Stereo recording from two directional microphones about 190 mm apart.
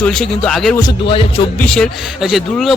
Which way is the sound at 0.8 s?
30° left (ahead or behind).